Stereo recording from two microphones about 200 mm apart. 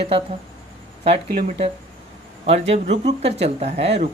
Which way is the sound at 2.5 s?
30° right (ahead or behind).